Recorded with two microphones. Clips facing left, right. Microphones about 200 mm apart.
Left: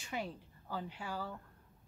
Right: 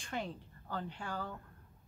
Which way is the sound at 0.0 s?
5° left (ahead or behind).